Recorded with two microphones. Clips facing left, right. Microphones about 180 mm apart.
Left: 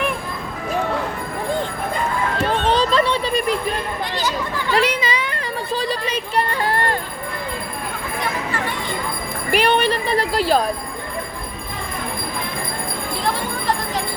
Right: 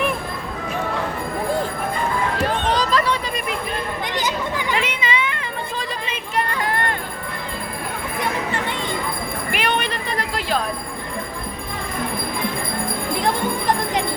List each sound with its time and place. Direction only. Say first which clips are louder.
2.4 s children playing: left 4 dB; 25° left (ahead or behind)
4.1 s chatter: right 1 dB; 20° right (ahead or behind)
4.7 s a sound: left 7 dB; 40° left (ahead or behind)
9.6 s jingle bell: left 7 dB; 35° left (ahead or behind)
13.2 s jingle bell: right 2 dB; 20° right (ahead or behind)